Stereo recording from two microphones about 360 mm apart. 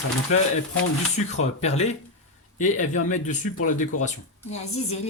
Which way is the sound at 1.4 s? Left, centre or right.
Centre.